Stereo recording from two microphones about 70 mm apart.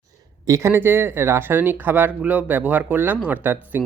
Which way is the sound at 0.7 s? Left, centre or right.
Right.